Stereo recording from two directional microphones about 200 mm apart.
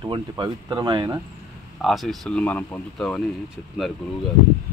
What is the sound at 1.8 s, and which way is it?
Speech, centre (ahead or behind).